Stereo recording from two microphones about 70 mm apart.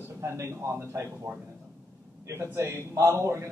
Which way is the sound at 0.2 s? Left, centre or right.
Right.